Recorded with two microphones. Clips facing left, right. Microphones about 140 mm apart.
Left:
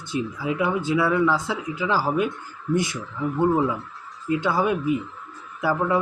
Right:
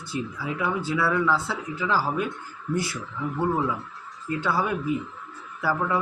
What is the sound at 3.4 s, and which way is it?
Speech, 20° left (ahead or behind).